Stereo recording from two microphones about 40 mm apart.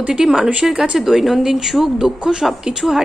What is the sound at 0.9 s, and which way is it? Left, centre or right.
A woman's voice, centre.